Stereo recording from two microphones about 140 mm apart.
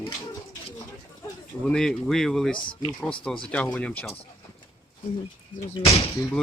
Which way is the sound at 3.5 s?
10° left (ahead or behind).